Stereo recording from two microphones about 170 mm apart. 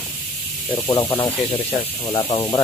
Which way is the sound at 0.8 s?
20° left (ahead or behind).